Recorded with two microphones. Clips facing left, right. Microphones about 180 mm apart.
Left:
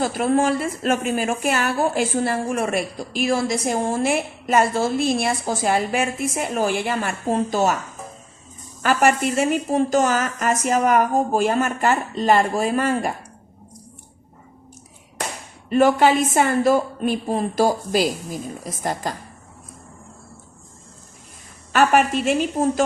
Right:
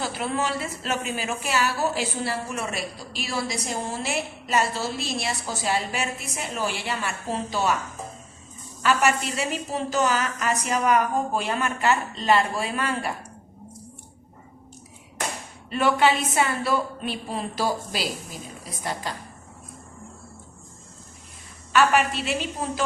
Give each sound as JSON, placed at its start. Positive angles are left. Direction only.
{"t": 0.0, "sound": "a woman's voice", "side_deg": 45}
{"t": 8.8, "sound": "a woman's voice", "side_deg": 50}
{"t": 15.7, "sound": "a woman's voice", "side_deg": 45}
{"t": 21.7, "sound": "a woman's voice", "side_deg": 45}